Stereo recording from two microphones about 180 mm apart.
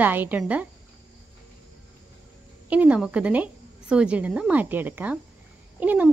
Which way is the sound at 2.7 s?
5° right (ahead or behind).